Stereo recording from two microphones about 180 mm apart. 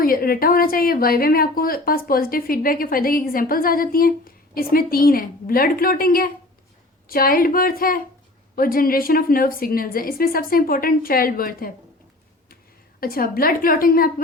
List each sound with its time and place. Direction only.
0.0 s a woman's voice: 55° left (ahead or behind)
13.0 s a woman's voice: 55° left (ahead or behind)